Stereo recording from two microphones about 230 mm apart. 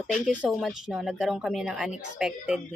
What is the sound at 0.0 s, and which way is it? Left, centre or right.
Speech, centre.